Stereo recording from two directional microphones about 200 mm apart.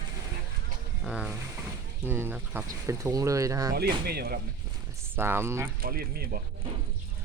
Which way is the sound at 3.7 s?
50° right (ahead or behind).